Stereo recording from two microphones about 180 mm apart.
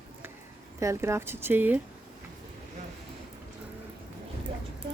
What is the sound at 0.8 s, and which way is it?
Speech, 15° right (ahead or behind).